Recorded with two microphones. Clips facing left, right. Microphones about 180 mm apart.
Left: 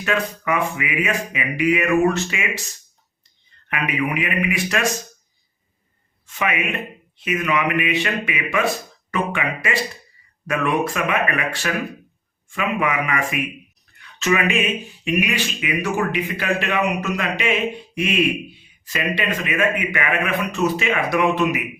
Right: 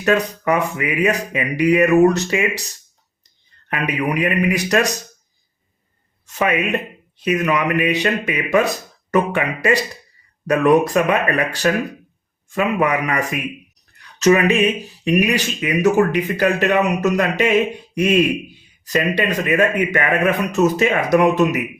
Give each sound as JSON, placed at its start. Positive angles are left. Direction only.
{"t": 0.0, "sound": "speech", "side_deg": -40}
{"t": 3.7, "sound": "speech", "side_deg": -40}
{"t": 6.2, "sound": "a man's voice", "side_deg": -40}